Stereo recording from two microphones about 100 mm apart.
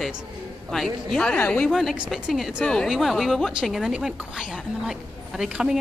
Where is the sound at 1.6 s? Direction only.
Centre (ahead or behind).